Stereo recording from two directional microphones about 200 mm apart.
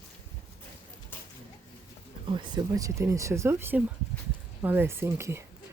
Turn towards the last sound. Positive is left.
turn(degrees=-10)  # may be behind; listen again after turning